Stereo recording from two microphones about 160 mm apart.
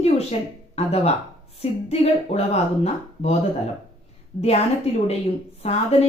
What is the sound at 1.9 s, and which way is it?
Speech, 40° left (ahead or behind).